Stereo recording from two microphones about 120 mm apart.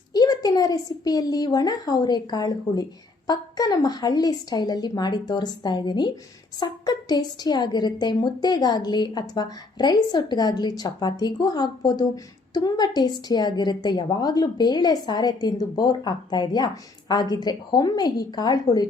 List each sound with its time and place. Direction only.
0.1 s a woman's voice: 35° left (ahead or behind)